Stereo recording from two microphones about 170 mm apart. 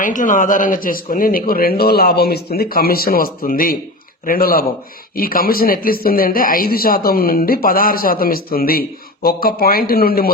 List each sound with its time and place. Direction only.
0.0 s speech: 50° left (ahead or behind)